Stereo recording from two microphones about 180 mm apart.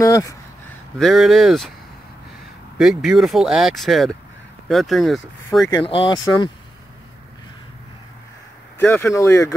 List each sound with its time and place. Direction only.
0.0 s speech: 20° left (ahead or behind)
0.9 s speech: centre (ahead or behind)
2.8 s speech: centre (ahead or behind)
5.7 s speech: 25° left (ahead or behind)
8.7 s speech: 10° left (ahead or behind)